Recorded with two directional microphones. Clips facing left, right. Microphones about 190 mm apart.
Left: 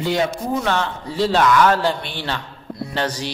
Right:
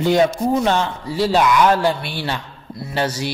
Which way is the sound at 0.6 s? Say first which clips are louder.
Right 3 dB; 15° right (ahead or behind).